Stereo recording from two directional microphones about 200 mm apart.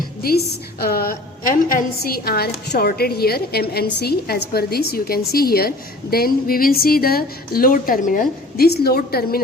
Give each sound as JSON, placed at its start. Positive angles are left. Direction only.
{"t": 0.2, "sound": "a woman's voice", "side_deg": 50}